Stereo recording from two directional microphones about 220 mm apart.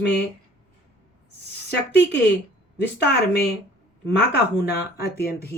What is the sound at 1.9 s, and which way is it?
Speech, 50° left (ahead or behind).